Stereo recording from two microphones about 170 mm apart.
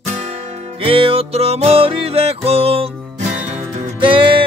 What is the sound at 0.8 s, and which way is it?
Music, 30° right (ahead or behind).